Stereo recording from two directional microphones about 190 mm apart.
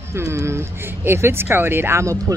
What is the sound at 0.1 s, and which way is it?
Speech, 15° right (ahead or behind).